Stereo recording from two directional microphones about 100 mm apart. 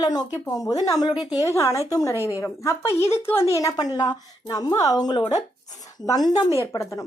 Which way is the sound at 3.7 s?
45° left (ahead or behind).